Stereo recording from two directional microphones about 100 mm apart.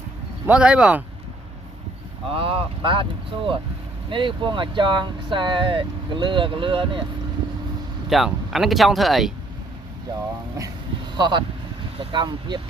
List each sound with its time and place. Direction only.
0.4 s speech: 10° right (ahead or behind)
2.3 s speech: 65° right (ahead or behind)
8.1 s speech: centre (ahead or behind)
11.2 s speech: 50° right (ahead or behind)